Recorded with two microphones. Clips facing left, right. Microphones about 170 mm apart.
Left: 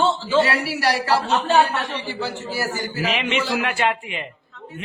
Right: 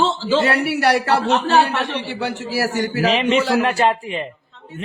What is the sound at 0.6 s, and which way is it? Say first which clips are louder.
A man's voice: right 4 dB; 55° right (ahead or behind).